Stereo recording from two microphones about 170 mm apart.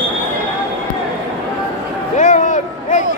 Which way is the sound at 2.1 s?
45° left (ahead or behind).